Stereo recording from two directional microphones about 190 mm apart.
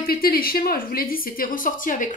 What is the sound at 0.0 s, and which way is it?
A woman's voice, 50° left (ahead or behind).